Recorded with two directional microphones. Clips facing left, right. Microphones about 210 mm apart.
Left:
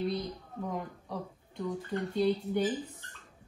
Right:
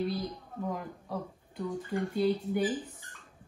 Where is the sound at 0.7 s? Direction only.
Centre (ahead or behind).